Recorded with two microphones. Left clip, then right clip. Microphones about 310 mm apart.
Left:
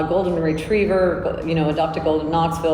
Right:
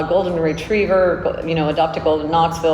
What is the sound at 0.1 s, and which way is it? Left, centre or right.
A woman's voice, centre.